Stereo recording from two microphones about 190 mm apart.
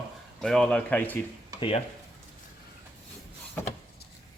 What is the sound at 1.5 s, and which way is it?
Speech, 25° left (ahead or behind).